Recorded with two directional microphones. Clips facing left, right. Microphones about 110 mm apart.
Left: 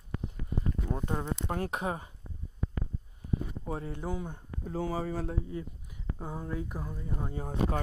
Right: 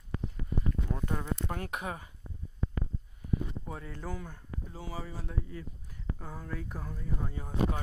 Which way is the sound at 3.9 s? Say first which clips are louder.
Left 4 dB; 20° left (ahead or behind).